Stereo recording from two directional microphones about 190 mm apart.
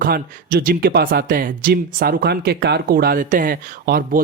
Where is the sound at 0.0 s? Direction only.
45° right (ahead or behind).